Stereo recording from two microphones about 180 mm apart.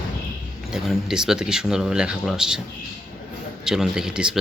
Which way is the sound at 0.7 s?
Centre (ahead or behind).